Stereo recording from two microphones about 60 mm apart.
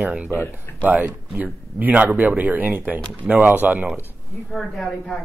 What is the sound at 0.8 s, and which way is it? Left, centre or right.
Speech, right.